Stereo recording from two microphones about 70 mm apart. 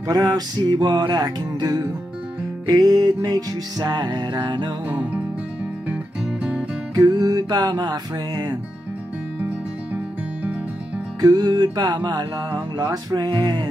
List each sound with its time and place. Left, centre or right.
0.1 s music: right
4.8 s music: right
7.0 s music: right
11.1 s music: right